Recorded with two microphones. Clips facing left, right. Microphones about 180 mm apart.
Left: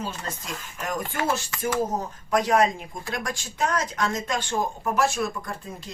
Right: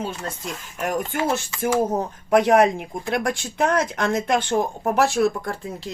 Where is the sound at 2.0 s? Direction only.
60° right (ahead or behind).